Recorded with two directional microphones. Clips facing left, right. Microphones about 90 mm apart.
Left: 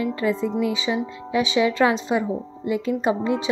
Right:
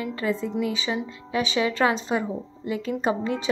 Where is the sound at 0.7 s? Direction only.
15° left (ahead or behind).